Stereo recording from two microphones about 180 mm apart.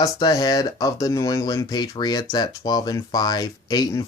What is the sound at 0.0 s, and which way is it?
Speech, 20° left (ahead or behind).